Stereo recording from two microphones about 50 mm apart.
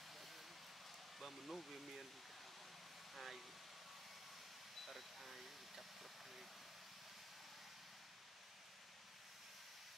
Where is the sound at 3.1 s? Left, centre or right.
Centre.